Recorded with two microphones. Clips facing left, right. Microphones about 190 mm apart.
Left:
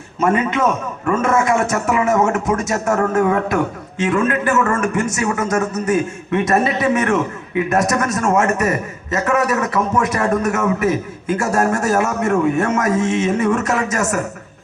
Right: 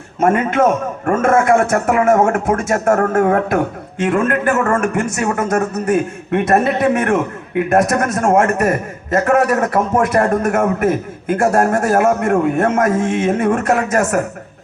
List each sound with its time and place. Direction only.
0.2 s a man's voice: 55° right (ahead or behind)